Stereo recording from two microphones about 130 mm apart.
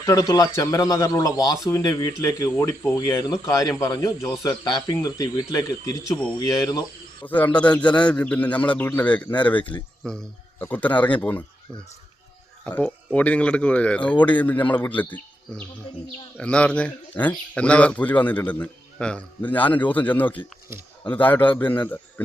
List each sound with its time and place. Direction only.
0.0 s a man's voice: 30° left (ahead or behind)
7.3 s speech: 10° left (ahead or behind)
12.6 s speech: 10° left (ahead or behind)